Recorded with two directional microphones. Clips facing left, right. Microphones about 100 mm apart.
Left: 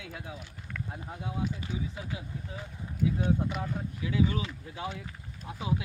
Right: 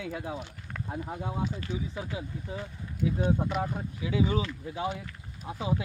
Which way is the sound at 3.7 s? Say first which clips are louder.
Right 1 dB; 20° right (ahead or behind).